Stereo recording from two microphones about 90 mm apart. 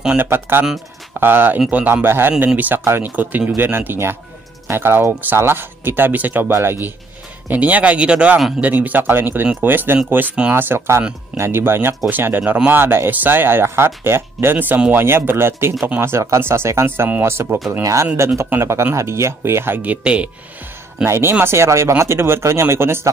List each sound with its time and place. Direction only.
0.2 s speech: 25° right (ahead or behind)
21.0 s speech: 30° right (ahead or behind)